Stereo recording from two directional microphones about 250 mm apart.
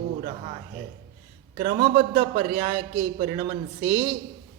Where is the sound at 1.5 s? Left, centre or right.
Right.